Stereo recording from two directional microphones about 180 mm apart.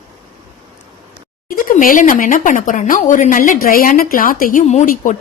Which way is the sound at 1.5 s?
50° left (ahead or behind).